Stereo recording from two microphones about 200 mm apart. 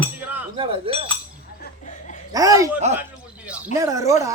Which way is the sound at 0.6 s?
25° right (ahead or behind).